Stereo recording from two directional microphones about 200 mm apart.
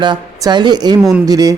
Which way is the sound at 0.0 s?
20° right (ahead or behind).